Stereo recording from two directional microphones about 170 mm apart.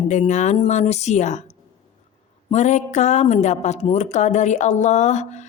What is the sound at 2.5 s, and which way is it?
Speech, 45° left (ahead or behind).